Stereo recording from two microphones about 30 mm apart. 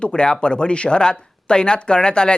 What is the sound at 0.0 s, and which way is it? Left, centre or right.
Speech, left.